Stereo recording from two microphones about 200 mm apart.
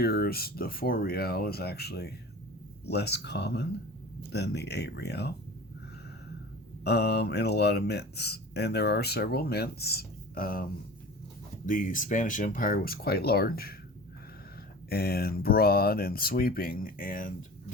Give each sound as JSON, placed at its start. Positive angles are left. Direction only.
{"t": 0.0, "sound": "speech", "side_deg": 50}
{"t": 6.8, "sound": "speech", "side_deg": 55}
{"t": 14.8, "sound": "speech", "side_deg": 50}